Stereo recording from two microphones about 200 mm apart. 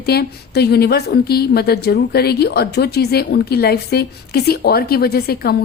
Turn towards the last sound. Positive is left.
turn(degrees=50)  # may be behind; listen again after turning